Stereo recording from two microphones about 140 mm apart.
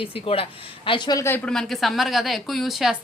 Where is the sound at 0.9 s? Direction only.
30° left (ahead or behind).